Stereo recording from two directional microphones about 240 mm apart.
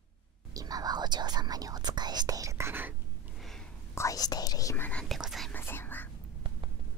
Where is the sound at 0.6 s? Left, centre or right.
Centre.